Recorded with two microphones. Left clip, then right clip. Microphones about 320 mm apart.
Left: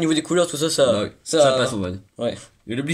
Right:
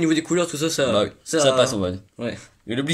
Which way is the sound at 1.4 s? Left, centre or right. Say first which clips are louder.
Right 1 dB; centre.